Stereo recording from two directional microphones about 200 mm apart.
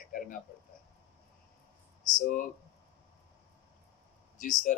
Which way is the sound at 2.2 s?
40° left (ahead or behind).